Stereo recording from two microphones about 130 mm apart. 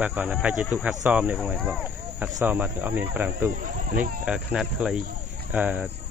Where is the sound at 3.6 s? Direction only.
90° right.